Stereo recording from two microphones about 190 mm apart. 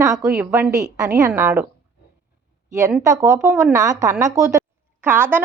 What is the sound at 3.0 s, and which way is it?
A woman's voice, 15° right (ahead or behind).